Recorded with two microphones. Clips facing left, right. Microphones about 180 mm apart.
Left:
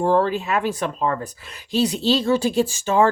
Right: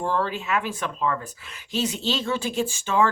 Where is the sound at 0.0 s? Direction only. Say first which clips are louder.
Left 7 dB; 40° left (ahead or behind).